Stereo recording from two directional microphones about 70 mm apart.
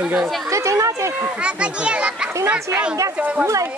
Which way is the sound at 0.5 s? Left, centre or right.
Right.